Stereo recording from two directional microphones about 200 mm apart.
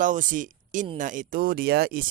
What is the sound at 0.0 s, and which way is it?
Speech, 40° right (ahead or behind).